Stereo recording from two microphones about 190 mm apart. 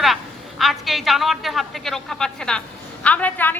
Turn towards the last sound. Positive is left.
turn(degrees=10)  # may be behind; listen again after turning